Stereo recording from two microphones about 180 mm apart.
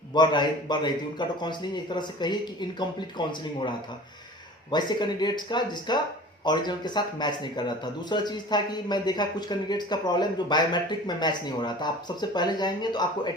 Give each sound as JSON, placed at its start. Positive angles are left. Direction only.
{"t": 0.1, "sound": "speech", "side_deg": 25}